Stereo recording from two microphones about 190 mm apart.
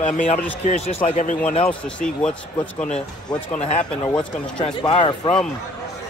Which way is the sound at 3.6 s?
35° left (ahead or behind).